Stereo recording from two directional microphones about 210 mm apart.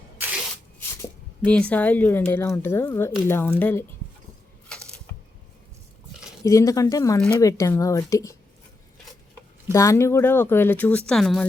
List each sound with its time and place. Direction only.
1.5 s speech: 5° left (ahead or behind)
6.4 s speech: 15° left (ahead or behind)
9.7 s speech: 15° left (ahead or behind)